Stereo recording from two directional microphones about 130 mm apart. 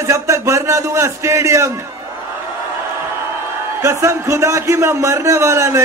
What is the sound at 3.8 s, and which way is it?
A man's voice, 20° right (ahead or behind).